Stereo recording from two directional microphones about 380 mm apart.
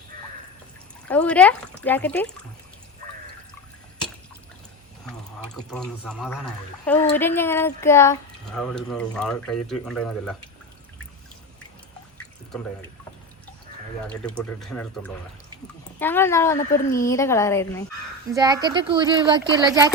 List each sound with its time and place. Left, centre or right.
0.1 s a sound: right
1.0 s speech: centre
5.5 s speech: centre
14.1 s speech: centre
18.3 s speech: centre